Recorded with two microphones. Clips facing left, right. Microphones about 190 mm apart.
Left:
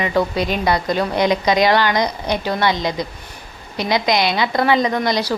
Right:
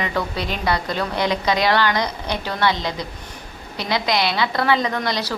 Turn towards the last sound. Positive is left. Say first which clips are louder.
# left 5 dB
turn(degrees=15)  # may be behind; listen again after turning